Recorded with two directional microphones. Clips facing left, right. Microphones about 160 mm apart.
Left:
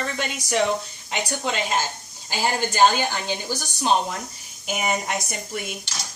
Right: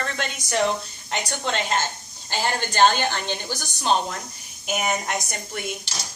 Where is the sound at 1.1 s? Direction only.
5° left (ahead or behind).